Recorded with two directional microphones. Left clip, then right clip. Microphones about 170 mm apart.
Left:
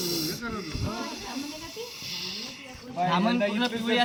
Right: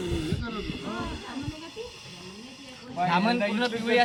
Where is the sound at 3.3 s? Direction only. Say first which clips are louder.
Even; 45° left (ahead or behind).